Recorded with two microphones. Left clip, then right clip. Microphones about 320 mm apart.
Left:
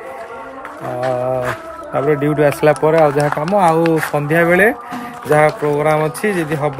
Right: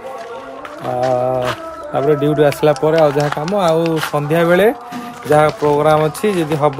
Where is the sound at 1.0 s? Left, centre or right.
Centre.